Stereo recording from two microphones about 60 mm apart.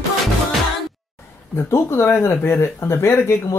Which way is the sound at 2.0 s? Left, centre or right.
Left.